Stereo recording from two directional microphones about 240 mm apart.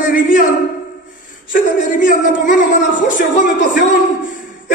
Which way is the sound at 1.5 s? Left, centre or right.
Left.